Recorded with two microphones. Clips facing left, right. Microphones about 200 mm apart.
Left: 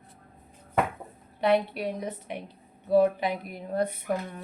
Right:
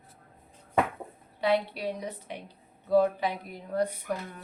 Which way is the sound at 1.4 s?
55° left (ahead or behind).